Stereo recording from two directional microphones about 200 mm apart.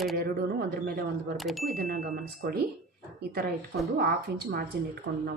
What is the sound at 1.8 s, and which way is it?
Speech, 50° right (ahead or behind).